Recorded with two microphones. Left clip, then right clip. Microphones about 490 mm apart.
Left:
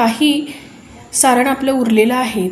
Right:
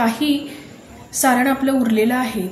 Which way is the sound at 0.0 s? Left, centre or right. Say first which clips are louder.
Left 5 dB; right.